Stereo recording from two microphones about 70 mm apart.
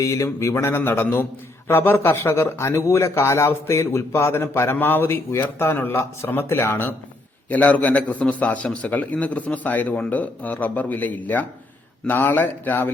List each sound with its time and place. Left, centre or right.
0.0 s a man's voice: left
0.5 s a man's voice: left
7.5 s speech: left